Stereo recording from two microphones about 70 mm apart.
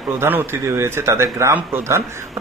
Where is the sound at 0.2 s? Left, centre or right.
Right.